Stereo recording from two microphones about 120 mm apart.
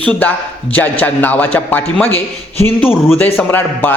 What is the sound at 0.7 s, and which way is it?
Speech, 15° left (ahead or behind).